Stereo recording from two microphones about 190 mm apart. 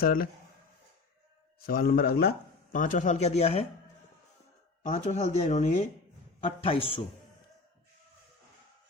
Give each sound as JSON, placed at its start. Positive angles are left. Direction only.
{"t": 0.0, "sound": "a man's voice", "side_deg": 50}
{"t": 1.6, "sound": "a man's voice", "side_deg": 50}
{"t": 2.7, "sound": "speech", "side_deg": 45}
{"t": 4.9, "sound": "a man's voice", "side_deg": 40}